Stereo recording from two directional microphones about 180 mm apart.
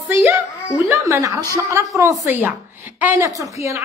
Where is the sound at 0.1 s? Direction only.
10° right (ahead or behind).